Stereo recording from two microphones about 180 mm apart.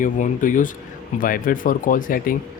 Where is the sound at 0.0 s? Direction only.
45° left (ahead or behind).